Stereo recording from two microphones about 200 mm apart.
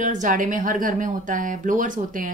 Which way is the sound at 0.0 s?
40° right (ahead or behind).